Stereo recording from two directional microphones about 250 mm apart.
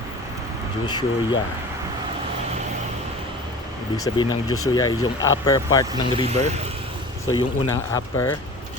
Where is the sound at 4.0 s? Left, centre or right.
Centre.